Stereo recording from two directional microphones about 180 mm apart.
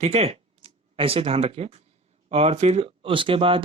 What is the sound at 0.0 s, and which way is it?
Speech, 35° right (ahead or behind).